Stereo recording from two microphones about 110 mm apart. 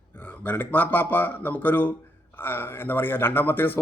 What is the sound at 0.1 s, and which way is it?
A man's voice, 15° left (ahead or behind).